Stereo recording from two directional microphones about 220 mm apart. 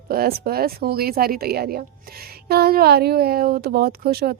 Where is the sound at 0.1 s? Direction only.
45° right (ahead or behind).